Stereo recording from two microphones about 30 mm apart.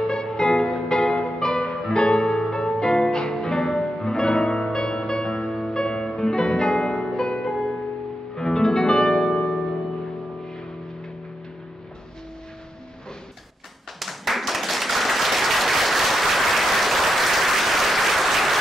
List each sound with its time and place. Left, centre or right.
0.0 s music: left
13.9 s applause: centre